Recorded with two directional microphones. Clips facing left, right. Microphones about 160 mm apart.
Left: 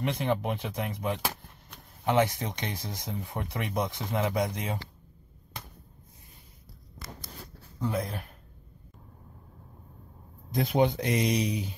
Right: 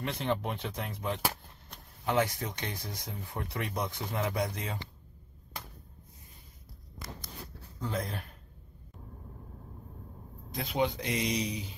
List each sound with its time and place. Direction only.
0.0 s speech: 15° left (ahead or behind)
7.8 s speech: 5° left (ahead or behind)
10.5 s speech: 50° left (ahead or behind)